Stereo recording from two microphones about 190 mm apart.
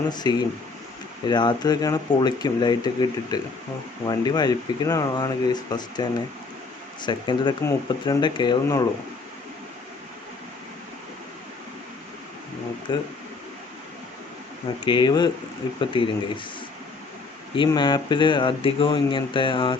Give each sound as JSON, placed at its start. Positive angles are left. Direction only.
{"t": 0.1, "sound": "speech", "side_deg": 20}
{"t": 12.9, "sound": "speech", "side_deg": 25}
{"t": 14.8, "sound": "speech", "side_deg": 25}
{"t": 17.5, "sound": "speech", "side_deg": 25}